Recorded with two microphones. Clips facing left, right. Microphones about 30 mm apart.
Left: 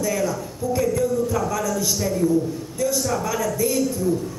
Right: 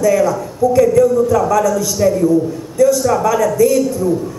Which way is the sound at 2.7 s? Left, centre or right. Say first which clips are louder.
Right 12 dB; centre.